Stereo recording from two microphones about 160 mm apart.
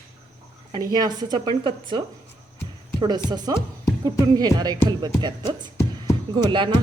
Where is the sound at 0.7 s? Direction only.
25° right (ahead or behind).